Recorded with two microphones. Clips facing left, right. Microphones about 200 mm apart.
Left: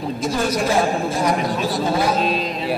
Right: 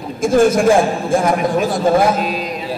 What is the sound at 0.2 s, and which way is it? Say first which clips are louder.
A man's voice: right 10 dB; 50° right (ahead or behind).